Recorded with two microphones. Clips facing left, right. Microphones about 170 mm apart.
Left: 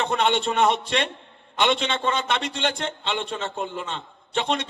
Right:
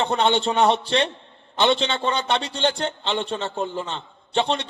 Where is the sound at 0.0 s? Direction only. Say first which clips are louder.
Right 2 dB; 30° right (ahead or behind).